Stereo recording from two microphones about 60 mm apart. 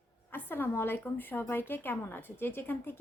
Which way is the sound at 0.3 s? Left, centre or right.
Left.